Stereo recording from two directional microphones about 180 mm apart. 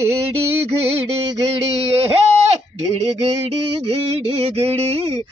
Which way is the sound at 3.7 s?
30° right (ahead or behind).